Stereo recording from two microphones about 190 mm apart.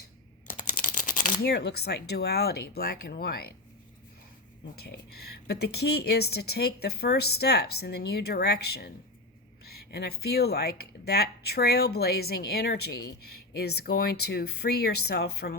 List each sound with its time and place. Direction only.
0.4 s a sound: 45° left (ahead or behind)
1.4 s speech: 60° left (ahead or behind)
5.5 s speech: 55° left (ahead or behind)